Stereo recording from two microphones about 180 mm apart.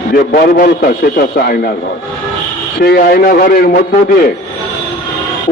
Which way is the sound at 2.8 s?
55° left (ahead or behind).